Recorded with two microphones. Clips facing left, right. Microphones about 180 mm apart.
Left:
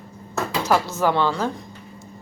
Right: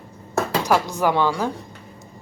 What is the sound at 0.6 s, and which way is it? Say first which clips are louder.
Speech: left 1 dB; 15° right (ahead or behind).